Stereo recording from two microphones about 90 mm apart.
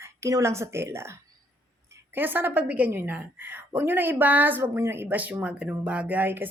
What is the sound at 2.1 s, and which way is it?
A woman's voice, 20° right (ahead or behind).